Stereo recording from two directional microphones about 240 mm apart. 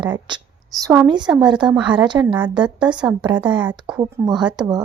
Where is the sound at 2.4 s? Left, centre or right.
Centre.